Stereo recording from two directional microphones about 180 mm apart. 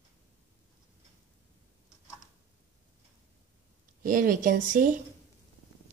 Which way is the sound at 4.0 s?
50° right (ahead or behind).